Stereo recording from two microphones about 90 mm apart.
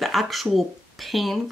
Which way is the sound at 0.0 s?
Centre (ahead or behind).